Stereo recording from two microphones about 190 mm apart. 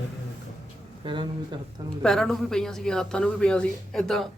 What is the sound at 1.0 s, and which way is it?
Speech, 25° right (ahead or behind).